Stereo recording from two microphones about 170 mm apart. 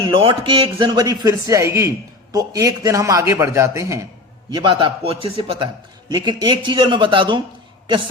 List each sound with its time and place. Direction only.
0.0 s a man's voice: 30° right (ahead or behind)
4.5 s a man's voice: 30° right (ahead or behind)